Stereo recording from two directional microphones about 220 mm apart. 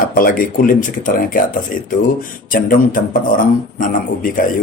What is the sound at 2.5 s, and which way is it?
Speech, 40° left (ahead or behind).